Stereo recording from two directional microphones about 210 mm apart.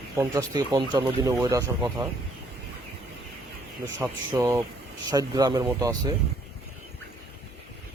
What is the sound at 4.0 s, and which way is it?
Speech, 10° right (ahead or behind).